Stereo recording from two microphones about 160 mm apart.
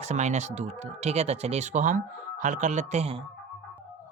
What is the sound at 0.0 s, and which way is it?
Speech, 45° right (ahead or behind).